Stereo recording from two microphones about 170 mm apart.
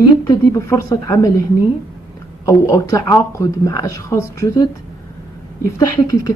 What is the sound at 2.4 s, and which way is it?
Speech, 20° left (ahead or behind).